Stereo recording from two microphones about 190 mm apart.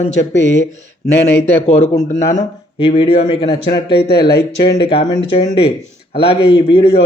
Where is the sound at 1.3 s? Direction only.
10° left (ahead or behind).